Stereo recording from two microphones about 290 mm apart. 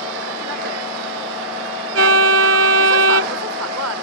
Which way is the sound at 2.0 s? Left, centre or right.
Right.